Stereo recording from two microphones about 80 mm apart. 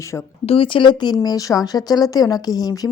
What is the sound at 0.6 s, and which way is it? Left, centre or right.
Speech, left.